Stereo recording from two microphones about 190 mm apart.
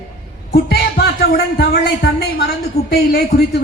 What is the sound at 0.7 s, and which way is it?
A woman's voice, 55° left (ahead or behind).